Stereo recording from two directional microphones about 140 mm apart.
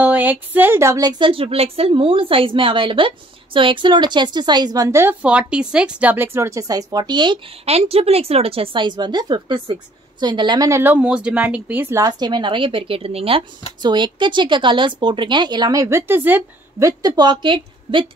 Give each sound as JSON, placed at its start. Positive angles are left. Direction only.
{"t": 0.0, "sound": "speech", "side_deg": -10}
{"t": 5.2, "sound": "a woman's voice", "side_deg": -10}
{"t": 7.6, "sound": "speech", "side_deg": -45}
{"t": 10.7, "sound": "speech", "side_deg": -15}
{"t": 17.0, "sound": "speech", "side_deg": -30}